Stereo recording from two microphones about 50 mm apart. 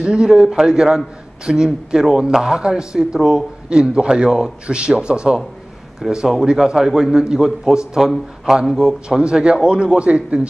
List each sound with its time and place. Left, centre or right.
0.0 s a man's voice: centre
5.9 s a man's voice: centre; by 10.4 s right